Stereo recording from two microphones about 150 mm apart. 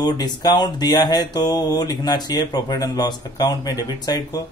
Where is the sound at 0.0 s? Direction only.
25° left (ahead or behind).